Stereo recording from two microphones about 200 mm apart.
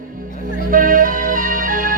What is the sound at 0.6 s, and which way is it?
Music, 45° right (ahead or behind).